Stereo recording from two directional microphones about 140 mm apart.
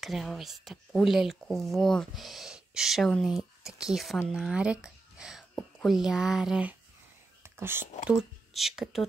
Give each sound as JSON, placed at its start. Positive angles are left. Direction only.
{"t": 0.0, "sound": "speech", "side_deg": 0}
{"t": 7.4, "sound": "whispering", "side_deg": -15}
{"t": 8.1, "sound": "speech", "side_deg": -5}